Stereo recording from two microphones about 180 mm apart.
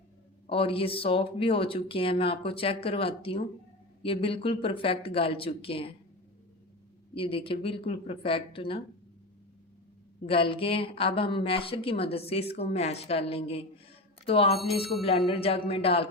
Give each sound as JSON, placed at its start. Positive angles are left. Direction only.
{"t": 0.4, "sound": "speech", "side_deg": 30}
{"t": 7.1, "sound": "speech", "side_deg": 30}
{"t": 10.2, "sound": "speech", "side_deg": 30}
{"t": 14.5, "sound": "speech", "side_deg": 0}
{"t": 15.3, "sound": "speech", "side_deg": 30}